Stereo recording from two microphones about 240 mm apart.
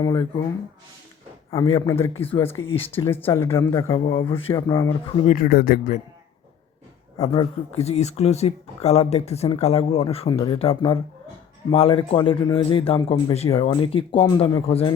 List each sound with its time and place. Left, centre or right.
0.0 s speech: centre
1.5 s a man's voice: centre
3.1 s a man's voice: centre
5.1 s speech: left
7.2 s speech: left